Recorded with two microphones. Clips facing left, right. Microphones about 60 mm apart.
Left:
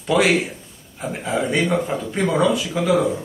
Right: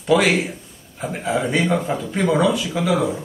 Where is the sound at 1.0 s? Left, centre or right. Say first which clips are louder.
Right 1 dB; centre.